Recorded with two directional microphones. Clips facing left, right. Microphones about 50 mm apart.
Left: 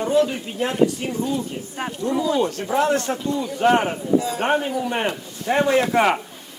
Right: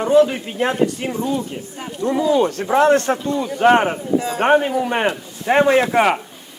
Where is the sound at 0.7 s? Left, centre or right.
Right.